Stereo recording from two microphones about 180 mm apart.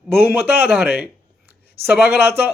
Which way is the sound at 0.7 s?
5° right (ahead or behind).